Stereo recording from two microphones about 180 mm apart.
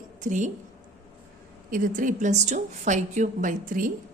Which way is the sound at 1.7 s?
50° right (ahead or behind).